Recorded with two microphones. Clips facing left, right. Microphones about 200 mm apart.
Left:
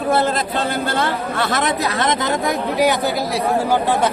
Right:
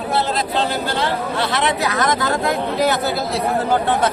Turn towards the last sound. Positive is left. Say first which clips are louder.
# left 1 dB
turn(degrees=10)  # may be behind; listen again after turning